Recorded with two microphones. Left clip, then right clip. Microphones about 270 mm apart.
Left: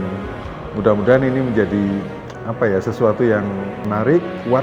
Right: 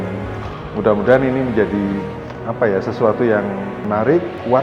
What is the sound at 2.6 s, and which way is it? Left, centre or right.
A man's voice, left.